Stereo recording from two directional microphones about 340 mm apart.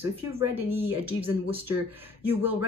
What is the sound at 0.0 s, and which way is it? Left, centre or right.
Speech, centre.